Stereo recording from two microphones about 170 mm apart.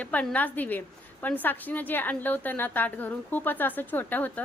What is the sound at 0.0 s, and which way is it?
A woman's voice, 10° left (ahead or behind).